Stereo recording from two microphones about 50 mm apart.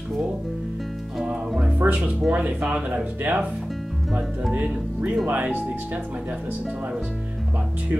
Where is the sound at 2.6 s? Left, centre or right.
Right.